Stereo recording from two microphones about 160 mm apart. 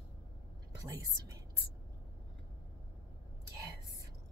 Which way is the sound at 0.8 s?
20° right (ahead or behind).